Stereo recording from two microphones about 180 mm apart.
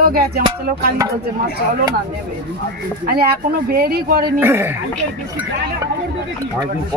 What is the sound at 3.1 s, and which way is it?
Speech, 55° right (ahead or behind).